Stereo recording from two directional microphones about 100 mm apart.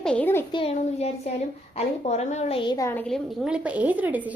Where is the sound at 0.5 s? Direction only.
85° left.